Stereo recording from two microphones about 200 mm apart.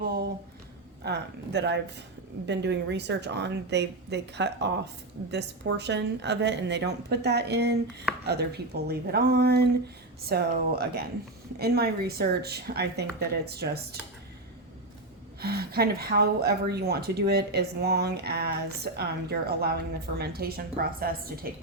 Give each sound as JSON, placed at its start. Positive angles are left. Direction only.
{"t": 1.0, "sound": "a woman's voice", "side_deg": -60}
{"t": 15.4, "sound": "a woman's voice", "side_deg": -50}